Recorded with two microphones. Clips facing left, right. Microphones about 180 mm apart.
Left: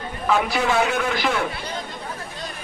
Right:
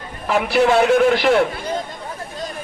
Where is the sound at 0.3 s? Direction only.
65° right (ahead or behind).